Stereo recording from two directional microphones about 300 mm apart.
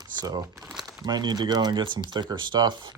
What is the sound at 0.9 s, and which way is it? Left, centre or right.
Speech, centre.